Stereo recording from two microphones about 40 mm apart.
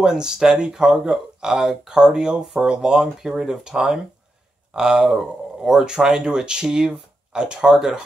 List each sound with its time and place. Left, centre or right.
0.0 s speech: centre